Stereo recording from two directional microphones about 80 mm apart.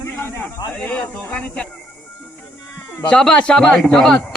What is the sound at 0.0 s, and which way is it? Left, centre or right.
Snake, left.